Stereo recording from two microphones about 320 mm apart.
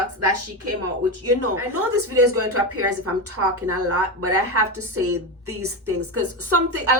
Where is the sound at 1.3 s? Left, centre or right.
Right.